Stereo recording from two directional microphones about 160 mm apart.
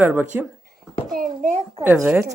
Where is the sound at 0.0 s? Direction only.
10° right (ahead or behind).